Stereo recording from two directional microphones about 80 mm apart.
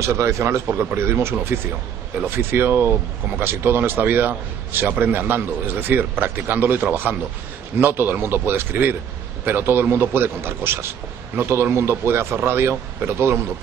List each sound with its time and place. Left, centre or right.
0.0 s a man's voice: right